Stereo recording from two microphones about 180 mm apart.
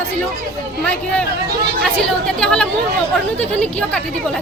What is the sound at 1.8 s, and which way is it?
Speech, 5° left (ahead or behind).